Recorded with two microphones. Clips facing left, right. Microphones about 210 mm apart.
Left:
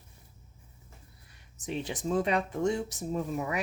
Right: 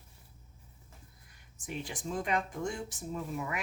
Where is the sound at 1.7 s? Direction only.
40° left (ahead or behind).